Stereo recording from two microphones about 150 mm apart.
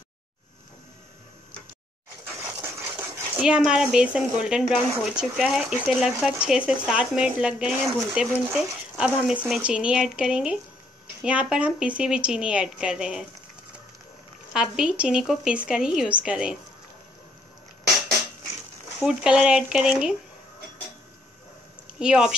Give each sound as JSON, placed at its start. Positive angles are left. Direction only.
{"t": 3.3, "sound": "speech", "side_deg": -5}
{"t": 14.5, "sound": "speech", "side_deg": -5}
{"t": 19.0, "sound": "speech", "side_deg": -5}
{"t": 21.9, "sound": "speech", "side_deg": -5}